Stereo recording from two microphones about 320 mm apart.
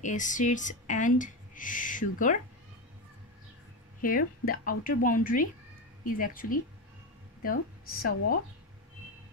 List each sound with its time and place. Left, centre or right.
0.0 s speech: left
4.0 s a woman's voice: left